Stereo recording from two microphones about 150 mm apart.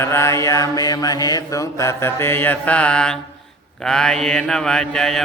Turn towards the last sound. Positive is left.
turn(degrees=5)  # may be behind; listen again after turning